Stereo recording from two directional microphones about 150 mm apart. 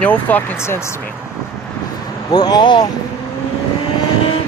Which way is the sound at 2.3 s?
25° left (ahead or behind).